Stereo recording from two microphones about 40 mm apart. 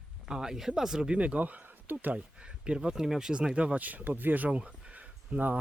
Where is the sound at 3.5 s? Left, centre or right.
Right.